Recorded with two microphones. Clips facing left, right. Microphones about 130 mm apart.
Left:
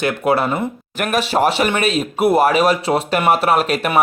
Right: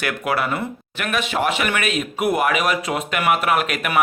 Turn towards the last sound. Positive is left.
turn(degrees=30)  # may be behind; listen again after turning